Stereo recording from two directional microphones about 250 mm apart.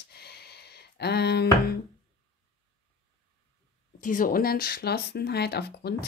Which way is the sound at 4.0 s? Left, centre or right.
Left.